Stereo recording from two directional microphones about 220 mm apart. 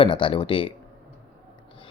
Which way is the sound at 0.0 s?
20° left (ahead or behind).